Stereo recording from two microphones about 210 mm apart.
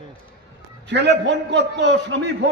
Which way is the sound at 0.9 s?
55° right (ahead or behind).